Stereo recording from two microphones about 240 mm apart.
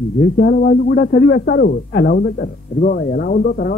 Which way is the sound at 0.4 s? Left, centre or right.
Left.